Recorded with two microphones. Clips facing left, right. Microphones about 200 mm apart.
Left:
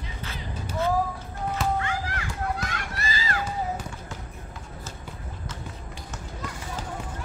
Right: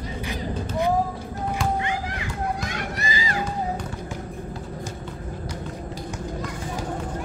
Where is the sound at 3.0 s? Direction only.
15° right (ahead or behind).